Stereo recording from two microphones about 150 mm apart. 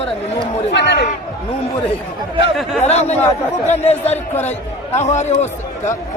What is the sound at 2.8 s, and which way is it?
Speech, 45° left (ahead or behind).